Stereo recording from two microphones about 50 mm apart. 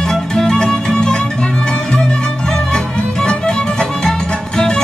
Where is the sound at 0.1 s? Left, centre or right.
Centre.